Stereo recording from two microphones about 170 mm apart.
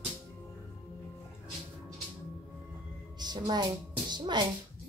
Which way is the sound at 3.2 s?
25° right (ahead or behind).